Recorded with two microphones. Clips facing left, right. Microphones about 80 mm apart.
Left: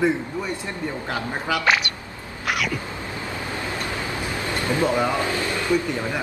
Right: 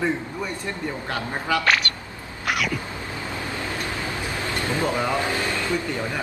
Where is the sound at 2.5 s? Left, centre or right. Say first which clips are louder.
Even; centre.